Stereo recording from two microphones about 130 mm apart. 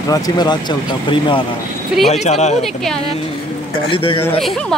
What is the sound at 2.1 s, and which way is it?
Speech, 60° left (ahead or behind).